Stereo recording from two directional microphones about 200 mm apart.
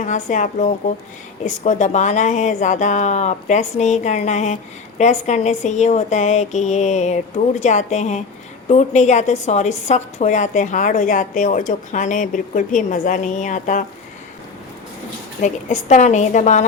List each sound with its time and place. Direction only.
0.0 s speech: 35° left (ahead or behind)
15.4 s speech: 35° left (ahead or behind)